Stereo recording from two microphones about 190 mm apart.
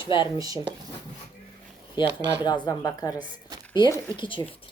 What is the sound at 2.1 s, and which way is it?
Speech, 65° right (ahead or behind).